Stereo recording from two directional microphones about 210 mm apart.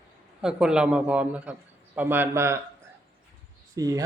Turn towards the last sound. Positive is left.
turn(degrees=-15)  # may be behind; listen again after turning